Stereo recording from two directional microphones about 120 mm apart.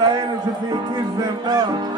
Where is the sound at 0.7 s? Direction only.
35° right (ahead or behind).